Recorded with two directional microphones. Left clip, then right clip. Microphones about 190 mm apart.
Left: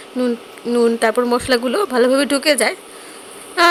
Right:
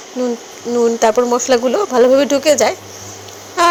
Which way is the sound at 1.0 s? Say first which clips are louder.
Right 3 dB; 15° left (ahead or behind).